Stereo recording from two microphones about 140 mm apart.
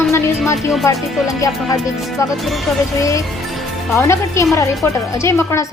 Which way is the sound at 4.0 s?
20° left (ahead or behind).